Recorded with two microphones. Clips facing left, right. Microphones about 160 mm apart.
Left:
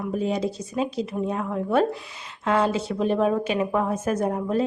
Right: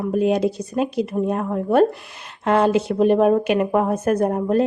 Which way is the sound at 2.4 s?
65° right (ahead or behind).